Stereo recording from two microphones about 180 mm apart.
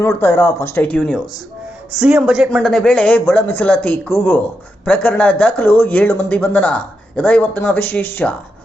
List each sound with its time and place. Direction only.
0.0 s speech: 15° left (ahead or behind)